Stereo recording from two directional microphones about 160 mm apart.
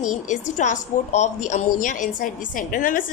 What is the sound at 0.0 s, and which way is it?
A woman's voice, 50° left (ahead or behind).